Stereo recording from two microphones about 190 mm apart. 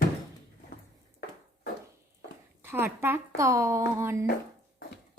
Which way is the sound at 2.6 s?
10° right (ahead or behind).